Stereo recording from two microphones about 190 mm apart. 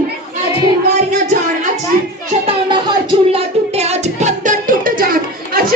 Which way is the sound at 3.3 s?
35° right (ahead or behind).